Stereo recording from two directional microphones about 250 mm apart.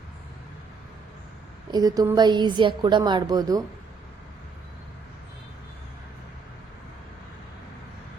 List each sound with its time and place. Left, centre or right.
1.7 s a woman's voice: centre